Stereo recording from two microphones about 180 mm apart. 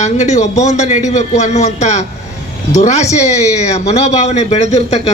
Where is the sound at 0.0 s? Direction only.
40° left (ahead or behind).